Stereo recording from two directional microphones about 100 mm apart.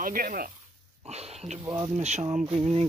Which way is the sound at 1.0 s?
90° right.